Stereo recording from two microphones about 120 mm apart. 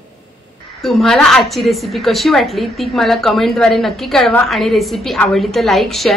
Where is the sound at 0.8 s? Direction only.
Centre (ahead or behind).